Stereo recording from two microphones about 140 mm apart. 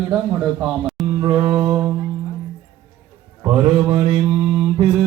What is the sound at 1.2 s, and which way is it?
Mantra, 30° right (ahead or behind).